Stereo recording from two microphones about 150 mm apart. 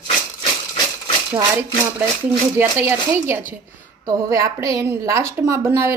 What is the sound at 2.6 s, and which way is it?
A woman's voice, 15° right (ahead or behind).